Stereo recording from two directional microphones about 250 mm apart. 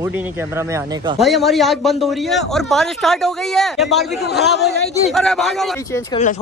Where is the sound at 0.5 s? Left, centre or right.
Centre.